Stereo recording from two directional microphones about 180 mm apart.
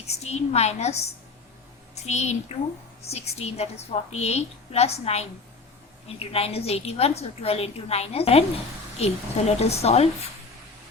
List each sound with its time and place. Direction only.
0.1 s a woman's voice: 35° left (ahead or behind)